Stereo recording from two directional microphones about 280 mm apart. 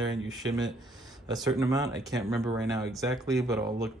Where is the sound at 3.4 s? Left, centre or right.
Centre.